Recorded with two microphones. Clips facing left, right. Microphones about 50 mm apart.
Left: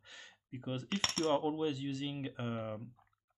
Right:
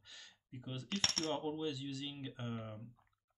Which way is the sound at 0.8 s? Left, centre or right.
Centre.